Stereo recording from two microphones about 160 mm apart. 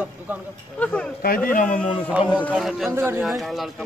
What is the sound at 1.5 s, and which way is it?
Speech, 50° left (ahead or behind).